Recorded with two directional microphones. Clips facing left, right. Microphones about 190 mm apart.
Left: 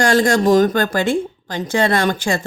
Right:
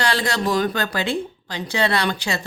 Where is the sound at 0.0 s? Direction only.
45° left (ahead or behind).